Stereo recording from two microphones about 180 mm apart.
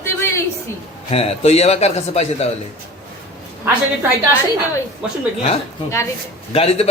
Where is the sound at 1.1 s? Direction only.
35° left (ahead or behind).